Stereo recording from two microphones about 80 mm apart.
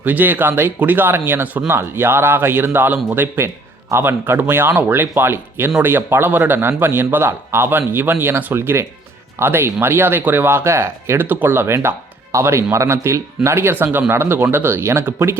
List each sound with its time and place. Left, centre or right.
0.0 s speech: right